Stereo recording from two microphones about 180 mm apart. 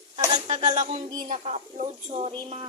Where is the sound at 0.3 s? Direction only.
40° right (ahead or behind).